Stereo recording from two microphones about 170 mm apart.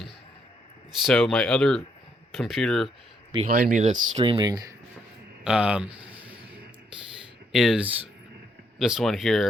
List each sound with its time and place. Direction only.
1.0 s speech: 5° left (ahead or behind)
3.4 s speech: 45° right (ahead or behind)
4.2 s speech: 25° right (ahead or behind)
5.4 s a sound: 5° right (ahead or behind)
7.5 s speech: centre (ahead or behind)